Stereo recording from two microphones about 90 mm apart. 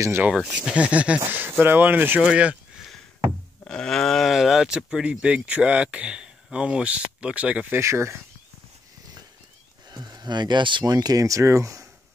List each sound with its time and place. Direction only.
0.2 s speech: 10° right (ahead or behind)
1.2 s speech: 25° right (ahead or behind)
3.6 s speech: 5° left (ahead or behind); by 7.8 s 15° right (ahead or behind)
7.8 s speech: 30° right (ahead or behind)
9.8 s speech: 50° right (ahead or behind)